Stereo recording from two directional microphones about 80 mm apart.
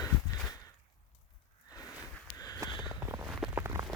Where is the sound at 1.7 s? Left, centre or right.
Left.